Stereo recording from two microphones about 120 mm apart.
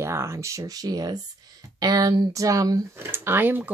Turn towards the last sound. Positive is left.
turn(degrees=-15)  # may be behind; listen again after turning